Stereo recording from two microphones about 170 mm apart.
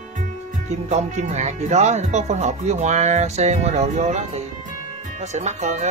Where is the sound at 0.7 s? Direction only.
40° right (ahead or behind).